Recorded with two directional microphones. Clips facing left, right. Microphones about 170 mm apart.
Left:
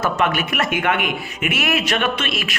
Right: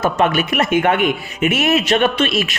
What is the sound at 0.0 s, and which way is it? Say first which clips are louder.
Speech: right 4 dB; 25° right (ahead or behind).